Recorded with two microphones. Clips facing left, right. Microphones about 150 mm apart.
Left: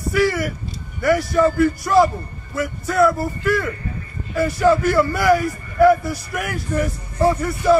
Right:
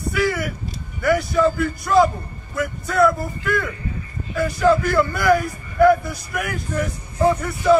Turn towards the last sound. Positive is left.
turn(degrees=0)  # may be behind; listen again after turning